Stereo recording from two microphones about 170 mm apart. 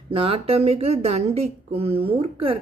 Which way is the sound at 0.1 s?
35° right (ahead or behind).